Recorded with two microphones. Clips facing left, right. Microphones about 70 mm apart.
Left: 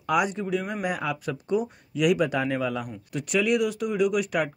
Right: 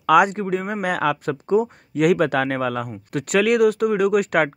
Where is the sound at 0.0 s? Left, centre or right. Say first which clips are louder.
Right 9 dB; right.